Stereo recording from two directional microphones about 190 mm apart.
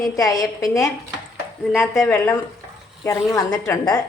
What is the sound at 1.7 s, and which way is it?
A woman's voice, 15° left (ahead or behind).